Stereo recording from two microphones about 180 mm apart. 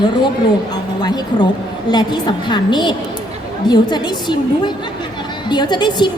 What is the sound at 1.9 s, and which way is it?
A woman's voice, 25° left (ahead or behind).